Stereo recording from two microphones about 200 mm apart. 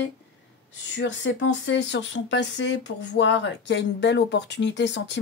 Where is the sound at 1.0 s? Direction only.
65° left (ahead or behind).